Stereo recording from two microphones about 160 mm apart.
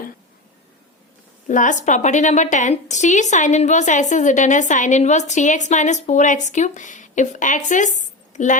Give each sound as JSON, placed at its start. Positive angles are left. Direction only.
{"t": 1.5, "sound": "a woman's voice", "side_deg": 50}